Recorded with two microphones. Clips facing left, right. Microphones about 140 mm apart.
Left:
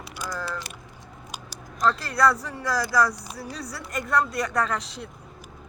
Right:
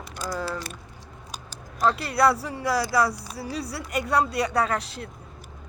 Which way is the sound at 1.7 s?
10° right (ahead or behind).